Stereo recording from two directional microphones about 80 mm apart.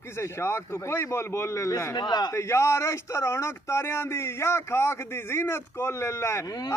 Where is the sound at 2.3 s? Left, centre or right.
Left.